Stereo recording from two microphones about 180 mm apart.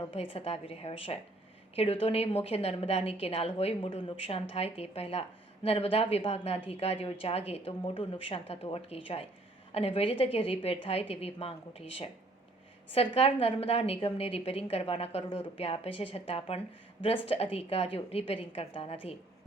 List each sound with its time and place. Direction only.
0.0 s a woman's voice: 30° left (ahead or behind)